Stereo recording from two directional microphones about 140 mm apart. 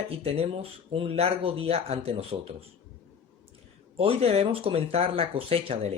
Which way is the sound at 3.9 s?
45° right (ahead or behind).